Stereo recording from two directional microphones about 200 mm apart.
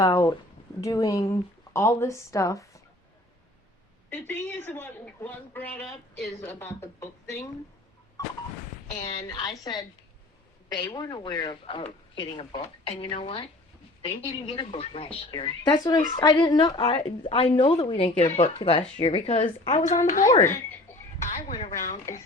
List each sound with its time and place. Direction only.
0.0 s a woman's voice: 15° left (ahead or behind)
4.1 s a woman's voice: 10° left (ahead or behind)
8.2 s a sound: 15° left (ahead or behind)
9.0 s a woman's voice: 25° left (ahead or behind)
20.4 s a sound: 10° left (ahead or behind)
21.2 s speech: 40° left (ahead or behind)